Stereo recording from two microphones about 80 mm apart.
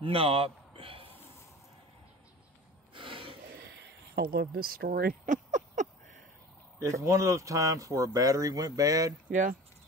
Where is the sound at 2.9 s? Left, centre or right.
Right.